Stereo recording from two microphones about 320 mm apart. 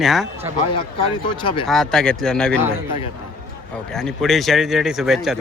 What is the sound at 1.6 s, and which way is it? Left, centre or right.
Speech, centre.